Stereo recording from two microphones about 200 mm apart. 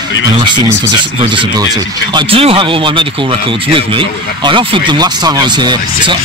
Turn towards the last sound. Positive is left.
turn(degrees=-25)  # may be behind; listen again after turning